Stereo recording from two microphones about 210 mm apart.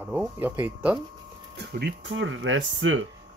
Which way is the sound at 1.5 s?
55° right (ahead or behind).